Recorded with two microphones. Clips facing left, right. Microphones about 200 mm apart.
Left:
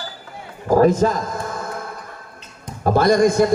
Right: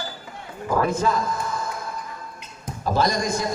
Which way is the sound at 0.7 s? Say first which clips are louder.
Left 7 dB; 40° left (ahead or behind).